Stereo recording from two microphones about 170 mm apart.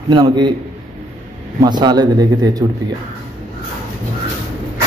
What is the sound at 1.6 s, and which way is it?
Speech, 25° right (ahead or behind).